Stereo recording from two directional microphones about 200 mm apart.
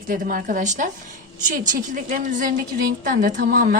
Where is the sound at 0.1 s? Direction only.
45° right (ahead or behind).